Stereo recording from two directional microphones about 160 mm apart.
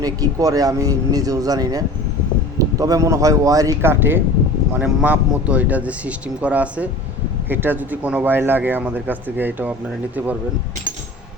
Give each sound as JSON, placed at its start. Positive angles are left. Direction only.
{"t": 0.0, "sound": "speech", "side_deg": -20}